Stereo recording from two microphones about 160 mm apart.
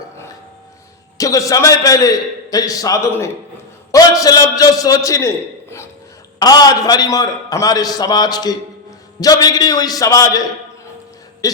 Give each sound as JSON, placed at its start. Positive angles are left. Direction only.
{"t": 1.2, "sound": "a man's voice", "side_deg": 20}
{"t": 6.4, "sound": "a man's voice", "side_deg": 25}
{"t": 11.4, "sound": "a man's voice", "side_deg": 25}